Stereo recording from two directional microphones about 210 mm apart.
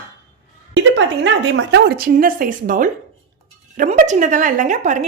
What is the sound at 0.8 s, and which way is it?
A woman's voice, 60° right (ahead or behind).